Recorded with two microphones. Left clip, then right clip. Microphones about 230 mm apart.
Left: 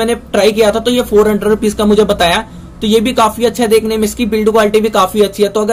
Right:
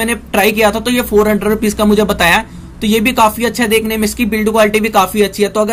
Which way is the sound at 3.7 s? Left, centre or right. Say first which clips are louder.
Left 3 dB; right.